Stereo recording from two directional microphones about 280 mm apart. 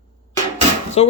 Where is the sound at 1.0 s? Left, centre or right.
Left.